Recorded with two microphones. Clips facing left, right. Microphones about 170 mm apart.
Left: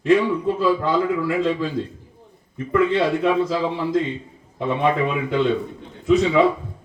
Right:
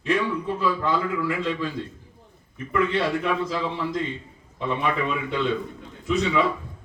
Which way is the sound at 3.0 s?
25° left (ahead or behind).